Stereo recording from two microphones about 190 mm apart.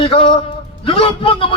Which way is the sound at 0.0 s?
30° left (ahead or behind).